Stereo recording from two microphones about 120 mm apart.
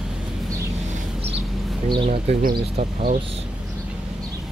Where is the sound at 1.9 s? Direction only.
50° right (ahead or behind); by 3.2 s 75° right (ahead or behind).